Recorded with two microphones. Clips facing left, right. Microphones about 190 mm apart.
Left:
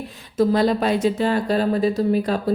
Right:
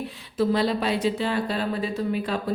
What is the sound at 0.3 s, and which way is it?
Speech, 45° left (ahead or behind).